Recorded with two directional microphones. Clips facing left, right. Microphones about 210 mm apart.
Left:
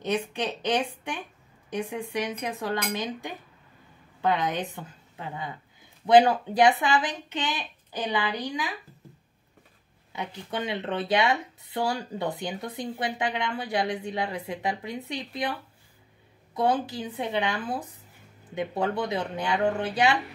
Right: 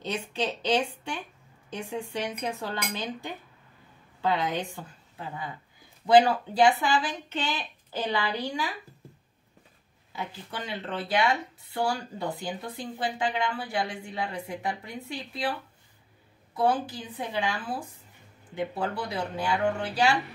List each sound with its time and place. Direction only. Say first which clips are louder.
0.0 s a woman's voice: left 3 dB; 15° left (ahead or behind)
6.0 s speech: left 1 dB; 20° left (ahead or behind)
10.1 s speech: left 4 dB; 20° left (ahead or behind)
16.5 s speech: left 1 dB; 20° left (ahead or behind)